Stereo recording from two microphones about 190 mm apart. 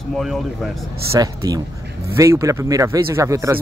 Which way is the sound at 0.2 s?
Centre (ahead or behind).